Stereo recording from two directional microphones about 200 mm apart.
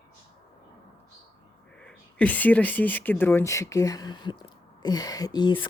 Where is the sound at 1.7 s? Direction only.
5° left (ahead or behind).